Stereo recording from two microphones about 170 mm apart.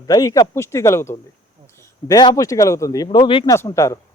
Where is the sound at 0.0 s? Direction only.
20° left (ahead or behind).